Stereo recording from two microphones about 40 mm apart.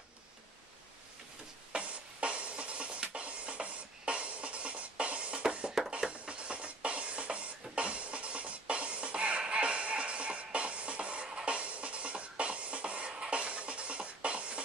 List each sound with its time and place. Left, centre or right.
1.7 s music: right